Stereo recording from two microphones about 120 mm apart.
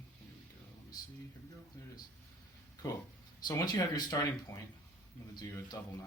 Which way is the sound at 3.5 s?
35° left (ahead or behind).